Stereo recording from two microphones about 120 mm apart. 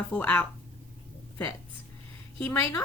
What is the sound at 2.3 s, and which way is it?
Speech, 10° left (ahead or behind).